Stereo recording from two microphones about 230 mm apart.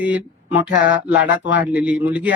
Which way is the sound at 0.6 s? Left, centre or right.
Left.